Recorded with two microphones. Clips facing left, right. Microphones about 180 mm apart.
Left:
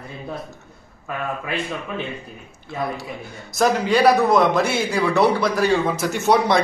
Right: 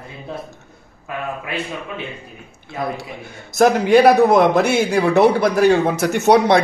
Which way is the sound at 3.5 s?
55° right (ahead or behind).